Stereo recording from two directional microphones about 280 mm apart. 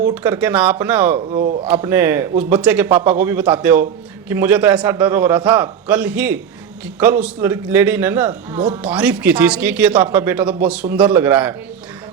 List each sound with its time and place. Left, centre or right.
0.1 s a man's voice: centre
1.3 s speech: right
1.6 s a man's voice: centre